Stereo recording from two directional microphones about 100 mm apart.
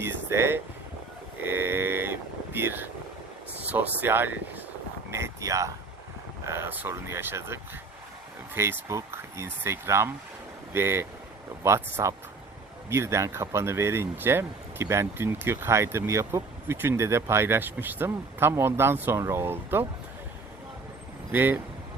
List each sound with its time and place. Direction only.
0.0 s speech: 25° right (ahead or behind)
1.4 s a sound: 20° right (ahead or behind)
3.6 s speech: 15° right (ahead or behind)
5.1 s speech: 30° right (ahead or behind)
21.3 s speech: 20° right (ahead or behind)